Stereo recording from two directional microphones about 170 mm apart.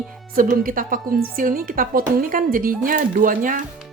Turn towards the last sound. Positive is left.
turn(degrees=-50)  # may be behind; listen again after turning